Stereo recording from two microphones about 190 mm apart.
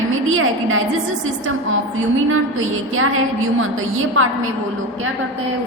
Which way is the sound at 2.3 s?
90° right.